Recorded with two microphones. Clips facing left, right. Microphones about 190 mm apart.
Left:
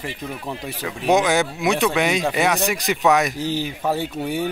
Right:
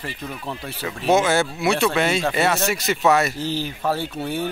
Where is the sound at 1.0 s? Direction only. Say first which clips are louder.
Even; 15° left (ahead or behind).